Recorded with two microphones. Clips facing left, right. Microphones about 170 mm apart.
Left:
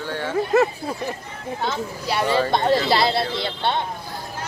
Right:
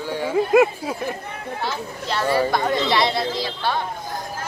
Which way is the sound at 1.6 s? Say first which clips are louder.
Left 3 dB; centre (ahead or behind).